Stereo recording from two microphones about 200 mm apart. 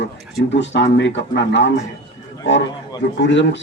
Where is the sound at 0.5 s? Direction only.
65° left (ahead or behind).